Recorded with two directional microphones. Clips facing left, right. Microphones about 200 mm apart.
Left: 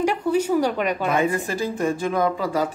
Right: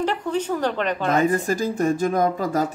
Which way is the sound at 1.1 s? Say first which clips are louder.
Right 2 dB; 40° right (ahead or behind).